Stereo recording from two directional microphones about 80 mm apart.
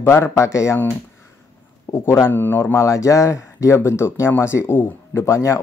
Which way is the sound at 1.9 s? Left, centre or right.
Left.